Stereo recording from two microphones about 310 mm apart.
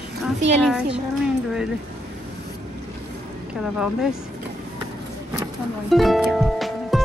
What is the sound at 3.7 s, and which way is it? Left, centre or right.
Speech, centre.